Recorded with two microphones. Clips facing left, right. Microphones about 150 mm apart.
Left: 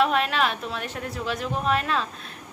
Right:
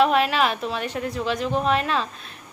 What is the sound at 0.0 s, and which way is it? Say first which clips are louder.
Speech: right 3 dB; centre (ahead or behind).